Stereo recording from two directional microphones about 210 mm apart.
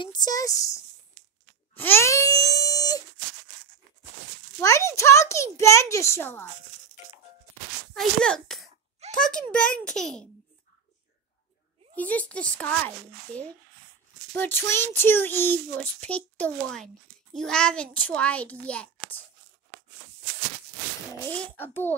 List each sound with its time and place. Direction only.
0.0 s a child's voice: 20° left (ahead or behind)
1.8 s wail: 10° left (ahead or behind)
4.6 s a child's voice: 15° left (ahead or behind)
7.9 s a child's voice: 5° left (ahead or behind)
11.9 s a child's voice: 5° left (ahead or behind)
21.3 s a child's voice: 10° left (ahead or behind)